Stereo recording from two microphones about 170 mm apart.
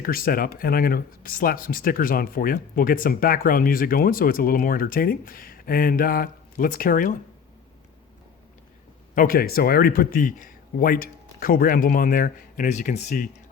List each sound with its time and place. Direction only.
0.0 s speech: 60° left (ahead or behind)
9.1 s speech: 60° left (ahead or behind)